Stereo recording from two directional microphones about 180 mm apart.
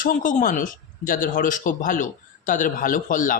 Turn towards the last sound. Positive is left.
turn(degrees=50)  # may be behind; listen again after turning